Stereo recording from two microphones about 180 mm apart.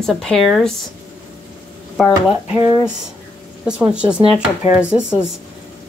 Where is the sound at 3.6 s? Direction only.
5° right (ahead or behind).